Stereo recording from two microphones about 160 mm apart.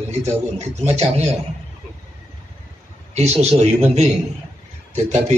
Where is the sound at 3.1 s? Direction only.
40° right (ahead or behind).